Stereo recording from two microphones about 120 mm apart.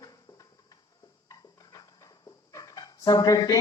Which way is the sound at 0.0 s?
30° left (ahead or behind).